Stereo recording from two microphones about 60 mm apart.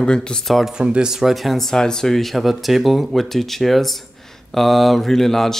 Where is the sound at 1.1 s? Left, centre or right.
Centre.